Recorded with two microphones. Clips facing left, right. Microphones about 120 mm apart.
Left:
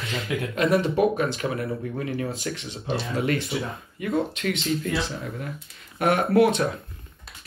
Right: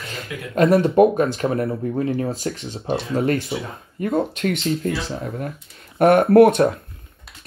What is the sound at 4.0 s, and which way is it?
Speech, 40° right (ahead or behind).